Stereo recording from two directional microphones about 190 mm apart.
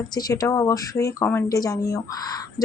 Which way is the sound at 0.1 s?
20° left (ahead or behind).